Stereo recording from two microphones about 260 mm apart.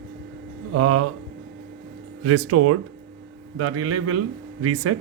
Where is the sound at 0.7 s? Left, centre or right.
Right.